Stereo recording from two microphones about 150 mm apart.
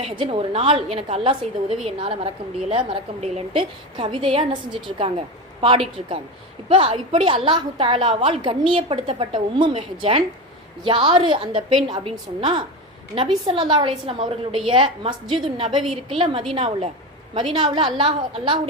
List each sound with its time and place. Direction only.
0.0 s a woman's voice: 35° right (ahead or behind)